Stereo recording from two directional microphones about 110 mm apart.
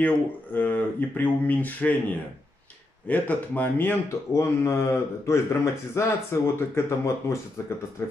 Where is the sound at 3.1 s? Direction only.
15° left (ahead or behind).